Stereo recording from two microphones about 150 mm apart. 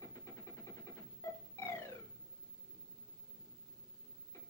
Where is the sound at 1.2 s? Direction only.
20° left (ahead or behind).